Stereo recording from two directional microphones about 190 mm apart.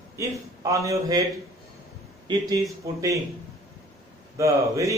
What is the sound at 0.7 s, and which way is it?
Speech, 15° right (ahead or behind).